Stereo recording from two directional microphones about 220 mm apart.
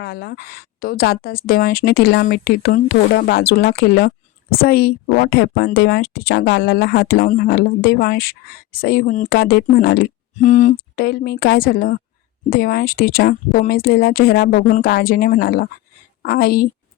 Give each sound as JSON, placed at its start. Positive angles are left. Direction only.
{"t": 0.0, "sound": "a woman's voice", "side_deg": 45}